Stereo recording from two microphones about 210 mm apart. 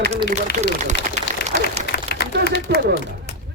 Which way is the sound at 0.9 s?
50° left (ahead or behind).